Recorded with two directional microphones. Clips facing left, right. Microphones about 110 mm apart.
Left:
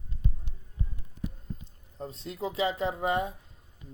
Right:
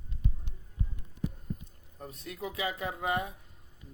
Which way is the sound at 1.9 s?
25° left (ahead or behind).